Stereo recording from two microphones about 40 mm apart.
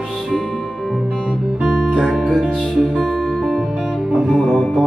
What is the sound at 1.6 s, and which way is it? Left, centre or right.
Guitar, centre.